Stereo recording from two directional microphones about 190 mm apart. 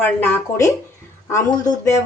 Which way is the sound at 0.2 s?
10° left (ahead or behind).